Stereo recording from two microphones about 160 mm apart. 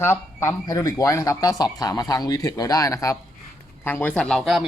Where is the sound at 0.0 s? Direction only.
15° left (ahead or behind).